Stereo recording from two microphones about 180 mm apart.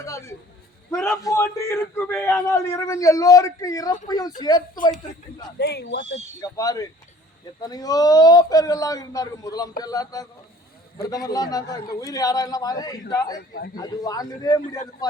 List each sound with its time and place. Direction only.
0.0 s a sound: 15° left (ahead or behind)
1.1 s a man's voice: 20° left (ahead or behind)
5.5 s speech: 65° left (ahead or behind)
6.4 s a man's voice: 20° left (ahead or behind)